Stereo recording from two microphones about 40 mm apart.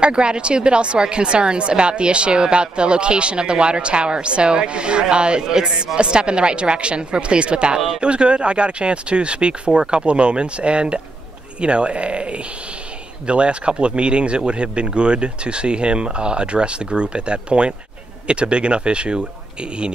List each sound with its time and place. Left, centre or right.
0.0 s speech: right